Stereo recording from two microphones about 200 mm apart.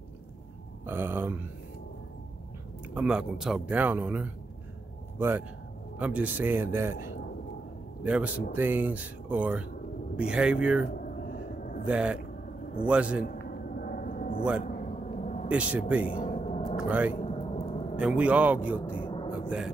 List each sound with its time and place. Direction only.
0.8 s speech: 10° right (ahead or behind)
2.9 s speech: 5° right (ahead or behind)
5.9 s speech: 5° right (ahead or behind)
8.0 s a man's voice: 5° right (ahead or behind)
11.0 s a sound: 45° left (ahead or behind)
11.9 s a man's voice: 5° right (ahead or behind)
13.5 s a sound: 45° left (ahead or behind)
15.5 s speech: 5° right (ahead or behind)
16.1 s gong: 30° left (ahead or behind)
16.7 s speech: 5° right (ahead or behind)
17.1 s a sound: 25° left (ahead or behind)
17.9 s speech: 5° right (ahead or behind)
18.9 s a sound: 25° left (ahead or behind)